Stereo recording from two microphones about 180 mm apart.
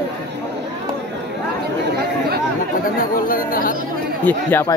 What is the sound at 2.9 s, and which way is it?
Speech, 50° left (ahead or behind).